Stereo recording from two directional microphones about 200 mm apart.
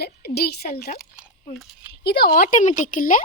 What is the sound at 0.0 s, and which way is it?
Speech, 50° left (ahead or behind).